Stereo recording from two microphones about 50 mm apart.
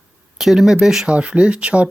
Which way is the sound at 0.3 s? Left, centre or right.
Centre.